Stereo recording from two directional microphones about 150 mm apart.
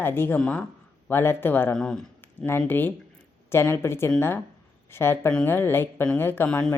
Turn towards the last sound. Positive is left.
turn(degrees=10)  # may be behind; listen again after turning